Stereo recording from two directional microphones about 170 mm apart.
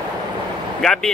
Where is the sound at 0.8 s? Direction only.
Centre (ahead or behind).